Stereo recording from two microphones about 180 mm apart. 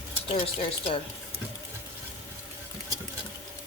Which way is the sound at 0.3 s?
30° left (ahead or behind).